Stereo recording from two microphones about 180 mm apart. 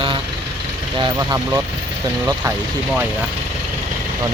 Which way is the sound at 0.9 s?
25° right (ahead or behind).